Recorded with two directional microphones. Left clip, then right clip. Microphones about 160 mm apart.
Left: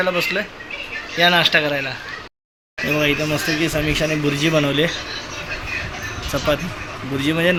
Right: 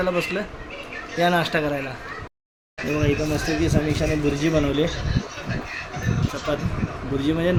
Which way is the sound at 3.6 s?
5° left (ahead or behind).